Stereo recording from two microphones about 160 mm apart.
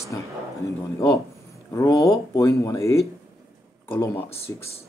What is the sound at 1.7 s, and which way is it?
Speech, 20° left (ahead or behind).